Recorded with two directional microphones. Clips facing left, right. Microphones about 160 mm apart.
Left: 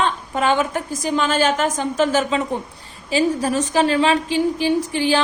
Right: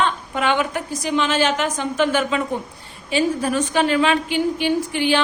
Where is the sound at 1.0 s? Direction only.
45° left (ahead or behind).